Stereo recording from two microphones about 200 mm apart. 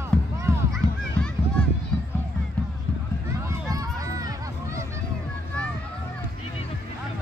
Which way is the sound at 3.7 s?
15° right (ahead or behind).